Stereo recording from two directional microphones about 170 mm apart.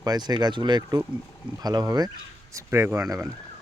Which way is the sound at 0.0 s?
25° right (ahead or behind).